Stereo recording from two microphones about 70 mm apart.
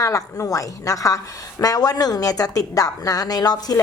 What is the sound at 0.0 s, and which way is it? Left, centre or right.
A woman's voice, left.